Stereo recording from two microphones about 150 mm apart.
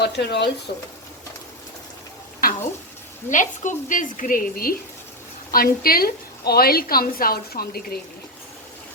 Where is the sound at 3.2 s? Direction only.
60° left (ahead or behind); by 7.9 s 90° left.